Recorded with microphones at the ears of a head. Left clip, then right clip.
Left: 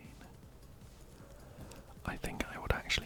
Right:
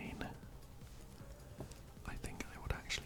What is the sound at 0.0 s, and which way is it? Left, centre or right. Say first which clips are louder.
Music: right 9 dB; right.